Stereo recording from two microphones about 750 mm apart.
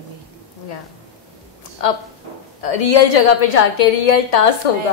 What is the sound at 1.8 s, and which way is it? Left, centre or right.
A woman's voice, left.